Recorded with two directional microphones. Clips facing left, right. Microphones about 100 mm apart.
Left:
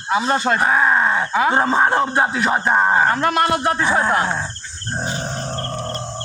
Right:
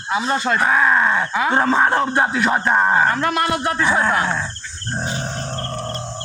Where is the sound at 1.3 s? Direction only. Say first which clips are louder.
Left 2 dB; 40° left (ahead or behind).